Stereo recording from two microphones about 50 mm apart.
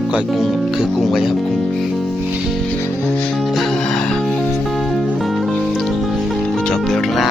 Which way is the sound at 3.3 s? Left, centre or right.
Centre.